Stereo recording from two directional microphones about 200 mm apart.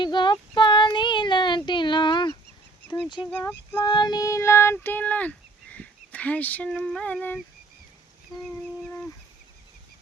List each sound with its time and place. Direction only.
0.0 s child singing: 25° left (ahead or behind)
3.3 s child singing: 15° left (ahead or behind)